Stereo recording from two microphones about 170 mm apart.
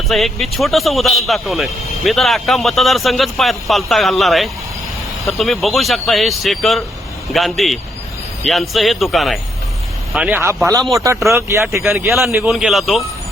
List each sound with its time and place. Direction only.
0.1 s speech: centre (ahead or behind); by 11.8 s 15° right (ahead or behind)
12.0 s speech: centre (ahead or behind)